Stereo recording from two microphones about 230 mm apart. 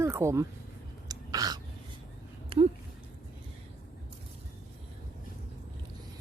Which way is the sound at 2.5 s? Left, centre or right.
Right.